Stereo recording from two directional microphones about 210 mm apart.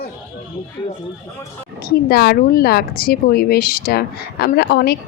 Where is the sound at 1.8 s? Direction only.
45° left (ahead or behind).